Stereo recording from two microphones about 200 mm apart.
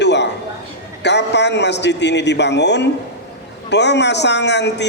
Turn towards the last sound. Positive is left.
turn(degrees=60)  # may be behind; listen again after turning